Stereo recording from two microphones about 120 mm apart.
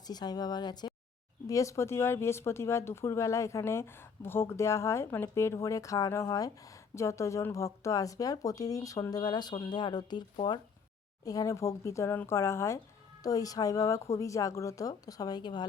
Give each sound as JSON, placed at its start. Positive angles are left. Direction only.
{"t": 0.1, "sound": "speech", "side_deg": 35}